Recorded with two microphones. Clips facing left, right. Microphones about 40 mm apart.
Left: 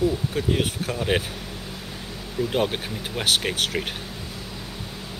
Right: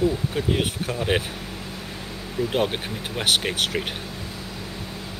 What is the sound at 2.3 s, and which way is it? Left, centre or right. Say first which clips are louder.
Speech: even; centre.